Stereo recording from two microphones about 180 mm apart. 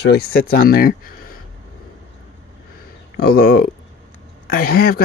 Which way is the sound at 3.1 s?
60° left (ahead or behind).